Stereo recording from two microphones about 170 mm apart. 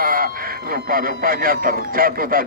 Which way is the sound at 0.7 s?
60° right (ahead or behind).